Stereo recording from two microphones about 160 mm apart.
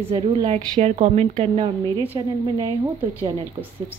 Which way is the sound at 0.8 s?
40° right (ahead or behind).